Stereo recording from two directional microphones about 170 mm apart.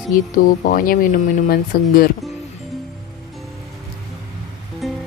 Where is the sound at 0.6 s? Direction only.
55° left (ahead or behind).